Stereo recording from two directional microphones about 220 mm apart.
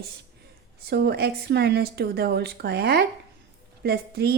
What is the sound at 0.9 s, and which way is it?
A woman's voice, 45° right (ahead or behind).